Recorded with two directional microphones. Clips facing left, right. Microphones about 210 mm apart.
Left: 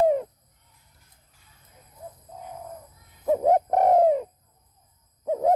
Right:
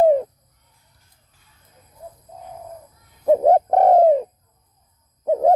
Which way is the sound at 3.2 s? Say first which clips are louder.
Right 6 dB; 35° right (ahead or behind).